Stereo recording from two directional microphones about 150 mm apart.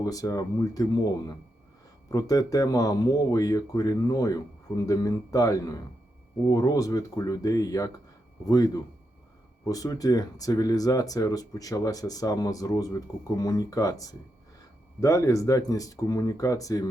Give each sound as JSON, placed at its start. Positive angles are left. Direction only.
{"t": 0.0, "sound": "speech", "side_deg": 25}